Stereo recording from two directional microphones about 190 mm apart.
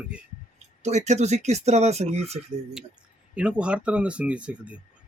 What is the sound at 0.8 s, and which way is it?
Speech, 35° right (ahead or behind).